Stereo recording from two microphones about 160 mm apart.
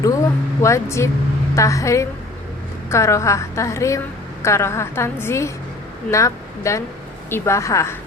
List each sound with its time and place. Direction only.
0.0 s a woman's voice: 20° left (ahead or behind)